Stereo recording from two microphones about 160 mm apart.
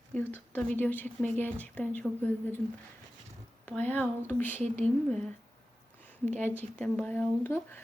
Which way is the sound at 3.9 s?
10° left (ahead or behind).